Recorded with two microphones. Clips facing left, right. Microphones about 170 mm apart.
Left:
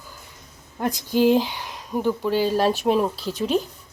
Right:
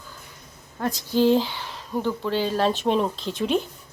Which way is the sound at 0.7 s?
15° left (ahead or behind).